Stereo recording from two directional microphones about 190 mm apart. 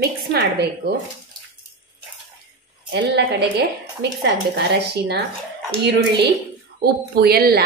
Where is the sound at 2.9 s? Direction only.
60° right (ahead or behind).